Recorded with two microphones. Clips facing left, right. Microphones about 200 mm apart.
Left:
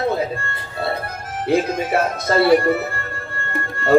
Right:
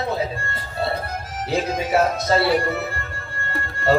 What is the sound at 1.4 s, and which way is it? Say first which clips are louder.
A man's voice: left 5 dB; 55° left (ahead or behind).